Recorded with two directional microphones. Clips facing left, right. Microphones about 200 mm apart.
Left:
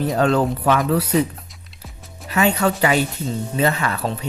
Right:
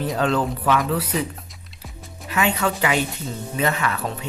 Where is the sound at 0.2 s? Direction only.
45° left (ahead or behind).